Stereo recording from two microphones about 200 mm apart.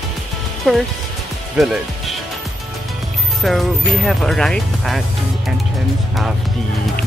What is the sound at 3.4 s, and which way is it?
Speech, centre (ahead or behind).